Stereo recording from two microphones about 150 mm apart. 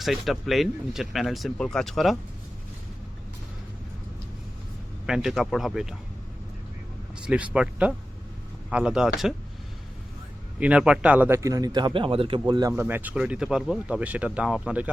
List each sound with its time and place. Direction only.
0.0 s speech: centre (ahead or behind)
5.0 s speech: 5° right (ahead or behind)
7.3 s speech: 10° right (ahead or behind)
10.6 s a man's voice: 10° right (ahead or behind); by 12.7 s 30° right (ahead or behind)
12.7 s speech: 15° right (ahead or behind)